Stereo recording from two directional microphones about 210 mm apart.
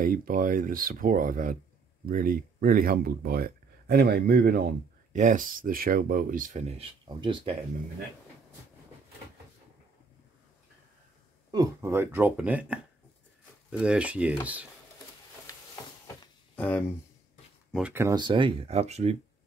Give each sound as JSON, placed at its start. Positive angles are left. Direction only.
{"t": 0.0, "sound": "speech", "side_deg": -40}
{"t": 11.5, "sound": "speech", "side_deg": -15}
{"t": 16.5, "sound": "speech", "side_deg": 10}
{"t": 17.7, "sound": "speech", "side_deg": -10}